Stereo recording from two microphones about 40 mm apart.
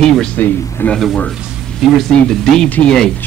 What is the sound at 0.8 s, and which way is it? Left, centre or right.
Speech, left.